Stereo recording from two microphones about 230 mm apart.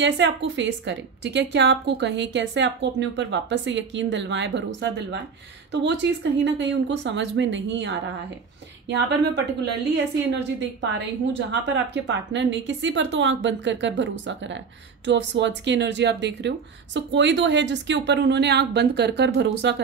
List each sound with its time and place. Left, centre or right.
0.0 s a woman's voice: right